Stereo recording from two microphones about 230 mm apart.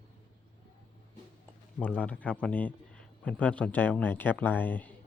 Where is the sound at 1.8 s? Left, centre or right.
Centre.